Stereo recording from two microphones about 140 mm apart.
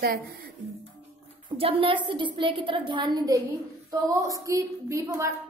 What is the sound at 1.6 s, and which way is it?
A woman's voice, 40° right (ahead or behind).